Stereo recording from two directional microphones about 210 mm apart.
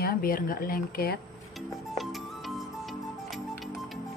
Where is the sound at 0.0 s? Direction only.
45° left (ahead or behind).